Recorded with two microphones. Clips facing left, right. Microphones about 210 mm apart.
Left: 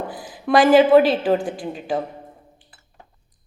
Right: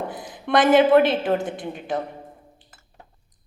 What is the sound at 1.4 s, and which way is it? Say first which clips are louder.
Speech: left 2 dB; 25° right (ahead or behind).